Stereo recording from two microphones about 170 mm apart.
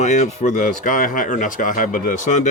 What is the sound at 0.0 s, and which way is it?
A man's voice, 40° left (ahead or behind).